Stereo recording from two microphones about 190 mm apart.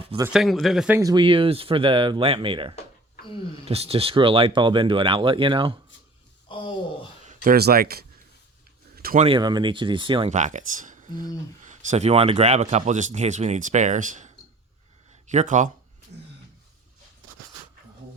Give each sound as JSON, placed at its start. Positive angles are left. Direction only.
{"t": 0.3, "sound": "speech", "side_deg": 0}
{"t": 0.9, "sound": "speech", "side_deg": -20}
{"t": 6.5, "sound": "speech", "side_deg": 25}
{"t": 7.3, "sound": "speech", "side_deg": -50}
{"t": 9.0, "sound": "a sound", "side_deg": -50}
{"t": 9.2, "sound": "speech", "side_deg": -25}
{"t": 10.3, "sound": "speech", "side_deg": -40}
{"t": 10.8, "sound": "a sound", "side_deg": -40}
{"t": 11.6, "sound": "speech", "side_deg": -40}